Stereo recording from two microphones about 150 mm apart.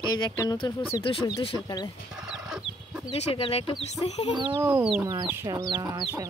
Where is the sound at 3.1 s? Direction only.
40° left (ahead or behind).